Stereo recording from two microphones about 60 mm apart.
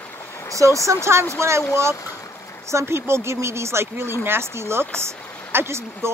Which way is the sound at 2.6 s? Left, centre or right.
Right.